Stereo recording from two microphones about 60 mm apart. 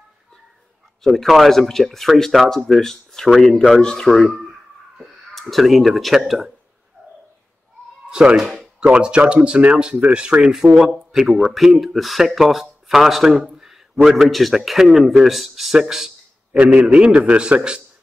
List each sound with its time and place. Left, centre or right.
1.0 s speech: centre
5.5 s speech: centre
8.1 s speech: centre
8.7 s speech: centre
13.4 s a sound: centre
14.0 s speech: centre
16.8 s speech: centre